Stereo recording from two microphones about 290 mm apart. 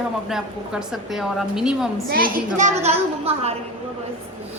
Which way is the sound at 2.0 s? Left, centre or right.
Right.